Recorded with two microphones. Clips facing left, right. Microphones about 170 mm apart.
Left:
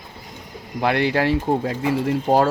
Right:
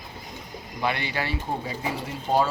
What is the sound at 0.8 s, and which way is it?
Speech, 75° left (ahead or behind).